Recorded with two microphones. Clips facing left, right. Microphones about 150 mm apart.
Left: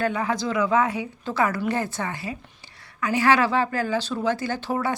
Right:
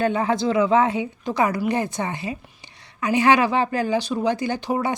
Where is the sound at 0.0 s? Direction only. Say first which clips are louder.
Right 4 dB; 25° right (ahead or behind).